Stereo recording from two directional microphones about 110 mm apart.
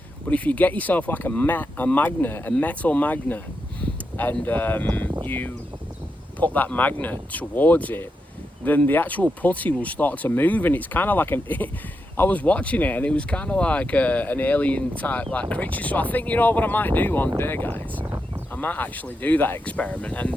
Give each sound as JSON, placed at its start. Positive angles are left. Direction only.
{"t": 0.3, "sound": "speech", "side_deg": 15}